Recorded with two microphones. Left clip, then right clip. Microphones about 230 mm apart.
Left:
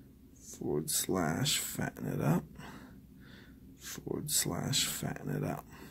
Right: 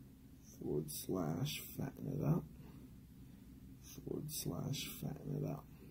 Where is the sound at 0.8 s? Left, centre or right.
Left.